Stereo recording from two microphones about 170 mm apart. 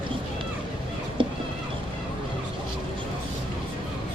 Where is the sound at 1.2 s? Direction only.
30° right (ahead or behind).